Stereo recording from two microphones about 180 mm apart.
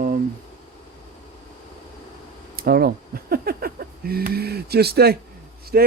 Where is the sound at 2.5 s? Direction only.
55° right (ahead or behind).